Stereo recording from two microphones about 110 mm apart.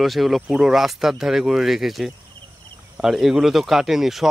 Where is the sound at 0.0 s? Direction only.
Centre (ahead or behind).